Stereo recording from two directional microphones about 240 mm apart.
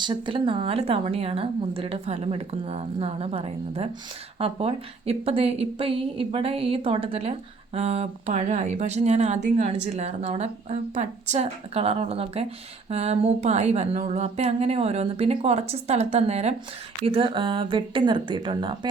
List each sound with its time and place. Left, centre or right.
0.0 s a woman's voice: centre